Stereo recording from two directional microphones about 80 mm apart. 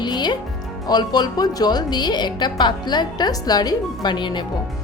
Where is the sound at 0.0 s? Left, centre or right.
Left.